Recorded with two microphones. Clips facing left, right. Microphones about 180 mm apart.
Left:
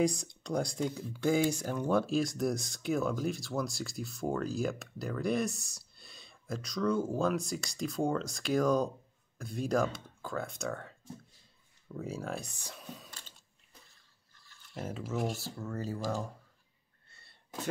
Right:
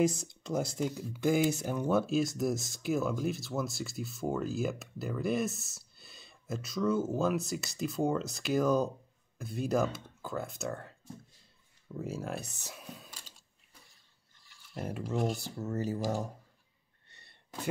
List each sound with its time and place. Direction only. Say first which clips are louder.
0.0 s speech: right 1 dB; 5° right (ahead or behind)
12.6 s computer keyboard: even; 5° right (ahead or behind)
14.3 s a sound: left 1 dB; 15° right (ahead or behind)
15.0 s speech: right 3 dB; centre (ahead or behind)
15.7 s speech: right 3 dB; 20° right (ahead or behind)
17.1 s a sound: left 1 dB; 20° right (ahead or behind)